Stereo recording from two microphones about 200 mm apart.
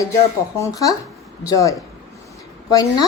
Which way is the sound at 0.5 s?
15° left (ahead or behind).